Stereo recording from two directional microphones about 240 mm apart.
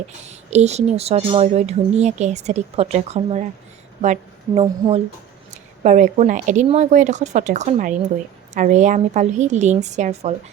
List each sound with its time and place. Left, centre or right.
0.3 s speech: right